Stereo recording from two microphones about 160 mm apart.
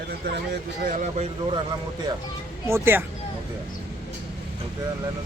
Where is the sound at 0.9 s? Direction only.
45° right (ahead or behind).